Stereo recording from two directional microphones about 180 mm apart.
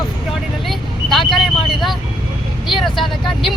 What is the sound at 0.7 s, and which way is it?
Vehicle, centre (ahead or behind).